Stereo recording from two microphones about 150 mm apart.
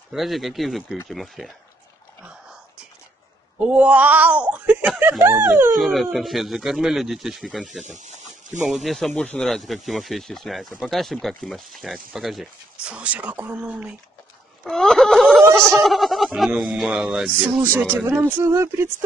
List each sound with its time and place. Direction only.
0.1 s speech: centre (ahead or behind)
3.5 s speech: 10° right (ahead or behind)
5.8 s speech: centre (ahead or behind)
14.6 s speech: 5° left (ahead or behind); by 19.0 s 15° right (ahead or behind)